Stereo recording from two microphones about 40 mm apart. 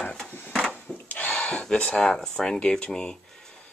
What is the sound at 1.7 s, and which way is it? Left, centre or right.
Speech, left.